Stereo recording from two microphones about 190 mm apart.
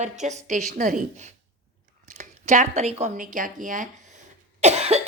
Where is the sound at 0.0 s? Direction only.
40° right (ahead or behind).